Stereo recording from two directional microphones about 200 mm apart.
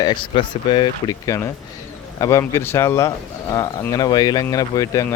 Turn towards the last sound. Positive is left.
turn(degrees=15)  # may be behind; listen again after turning